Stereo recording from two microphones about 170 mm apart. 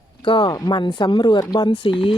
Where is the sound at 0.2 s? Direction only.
30° left (ahead or behind).